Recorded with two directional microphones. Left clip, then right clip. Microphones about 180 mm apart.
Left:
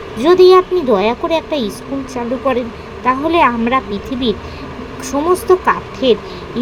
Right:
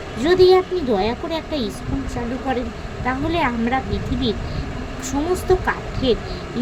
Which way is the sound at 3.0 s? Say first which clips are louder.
Left 9 dB; 20° left (ahead or behind).